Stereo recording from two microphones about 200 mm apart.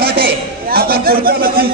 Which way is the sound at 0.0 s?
50° right (ahead or behind).